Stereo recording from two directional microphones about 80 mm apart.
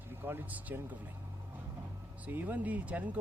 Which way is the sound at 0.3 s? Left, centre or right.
Right.